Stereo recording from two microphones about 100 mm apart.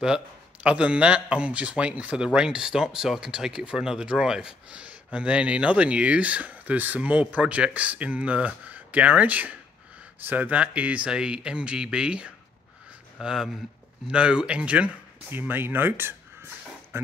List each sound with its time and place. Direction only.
0.7 s a man's voice: 10° right (ahead or behind)
16.9 s music: 25° right (ahead or behind)